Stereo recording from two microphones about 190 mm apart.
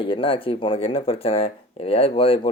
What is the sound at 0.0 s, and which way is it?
Speech, 25° left (ahead or behind).